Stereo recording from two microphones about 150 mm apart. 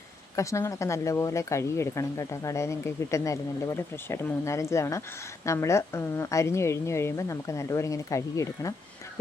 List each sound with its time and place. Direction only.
0.3 s speech: 20° left (ahead or behind)